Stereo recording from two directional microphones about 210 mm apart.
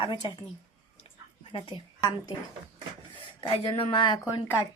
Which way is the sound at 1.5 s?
25° left (ahead or behind).